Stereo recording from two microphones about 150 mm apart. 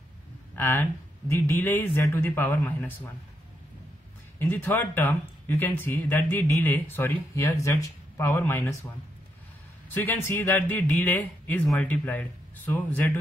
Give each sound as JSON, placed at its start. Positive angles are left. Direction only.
{"t": 0.6, "sound": "speech", "side_deg": 15}
{"t": 4.4, "sound": "speech", "side_deg": 15}
{"t": 9.9, "sound": "speech", "side_deg": 10}